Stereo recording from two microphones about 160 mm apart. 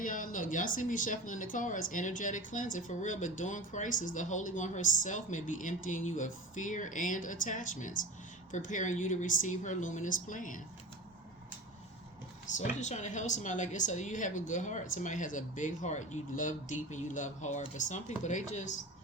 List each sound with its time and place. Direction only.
0.0 s speech: 55° left (ahead or behind)
12.5 s speech: 50° left (ahead or behind)